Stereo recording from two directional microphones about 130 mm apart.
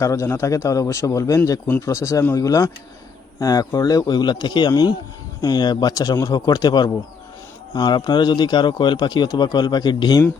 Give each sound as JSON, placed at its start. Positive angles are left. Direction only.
{"t": 0.0, "sound": "speech", "side_deg": 20}